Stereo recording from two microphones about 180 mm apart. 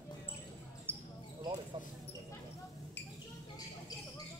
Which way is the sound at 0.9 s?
10° left (ahead or behind).